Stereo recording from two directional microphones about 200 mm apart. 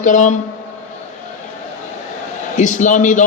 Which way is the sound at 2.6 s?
35° left (ahead or behind).